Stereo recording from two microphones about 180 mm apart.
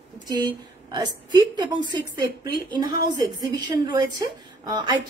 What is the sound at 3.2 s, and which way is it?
A woman's voice, 20° right (ahead or behind).